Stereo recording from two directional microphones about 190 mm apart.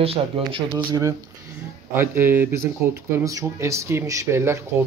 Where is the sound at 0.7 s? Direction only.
15° right (ahead or behind).